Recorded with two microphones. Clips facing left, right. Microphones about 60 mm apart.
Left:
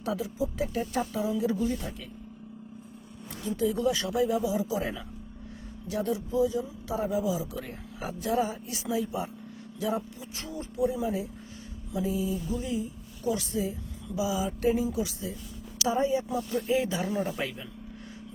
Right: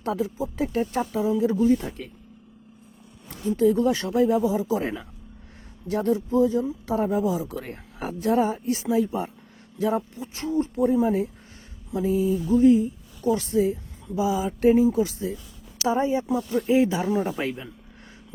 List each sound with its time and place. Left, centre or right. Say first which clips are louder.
0.0 s speech: right 4 dB; right
3.4 s speech: right 7 dB; right
10.8 s speech: right 5 dB; right